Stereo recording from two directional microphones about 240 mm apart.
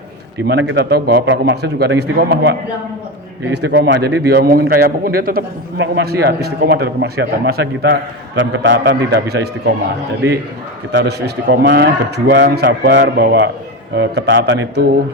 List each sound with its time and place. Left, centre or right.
0.4 s a man's voice: right
10.9 s a man's voice: right